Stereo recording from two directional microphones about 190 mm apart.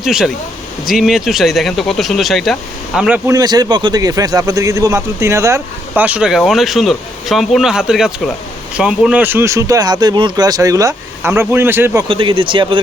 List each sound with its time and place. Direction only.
0.0 s speech: centre (ahead or behind)
3.2 s speech: 20° right (ahead or behind)
12.0 s speech: 25° right (ahead or behind)